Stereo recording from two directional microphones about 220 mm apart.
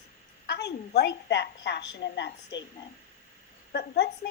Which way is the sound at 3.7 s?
50° left (ahead or behind).